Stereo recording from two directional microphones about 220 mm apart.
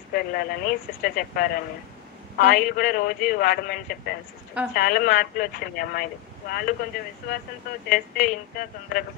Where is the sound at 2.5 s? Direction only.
40° left (ahead or behind).